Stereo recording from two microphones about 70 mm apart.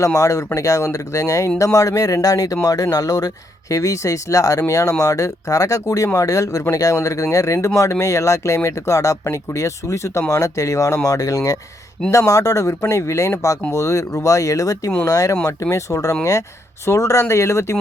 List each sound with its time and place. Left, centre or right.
0.0 s speech: left